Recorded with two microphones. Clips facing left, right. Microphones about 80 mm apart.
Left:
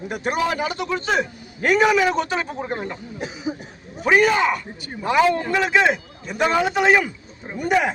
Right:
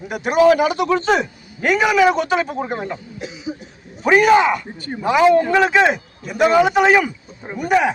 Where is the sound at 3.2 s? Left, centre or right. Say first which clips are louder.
Left 1 dB; left.